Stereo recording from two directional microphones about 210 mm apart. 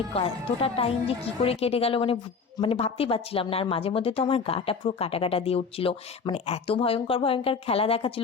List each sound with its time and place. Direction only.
0.6 s speech: 25° left (ahead or behind)